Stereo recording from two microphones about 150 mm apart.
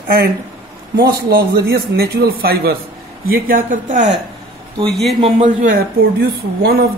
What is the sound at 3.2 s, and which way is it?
Speech, 70° right (ahead or behind).